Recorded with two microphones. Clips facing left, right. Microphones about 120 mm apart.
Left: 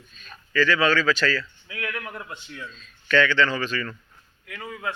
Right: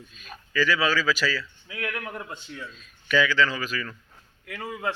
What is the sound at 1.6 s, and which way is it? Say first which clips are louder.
A man's voice: even; 25° right (ahead or behind).